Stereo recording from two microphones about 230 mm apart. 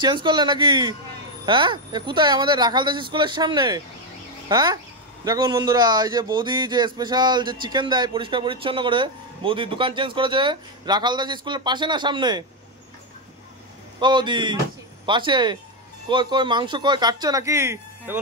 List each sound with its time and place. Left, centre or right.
0.0 s a man's voice: centre
13.9 s speech: centre